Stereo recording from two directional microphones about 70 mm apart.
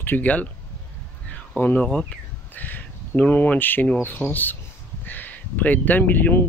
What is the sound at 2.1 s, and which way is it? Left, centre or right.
Speech, left.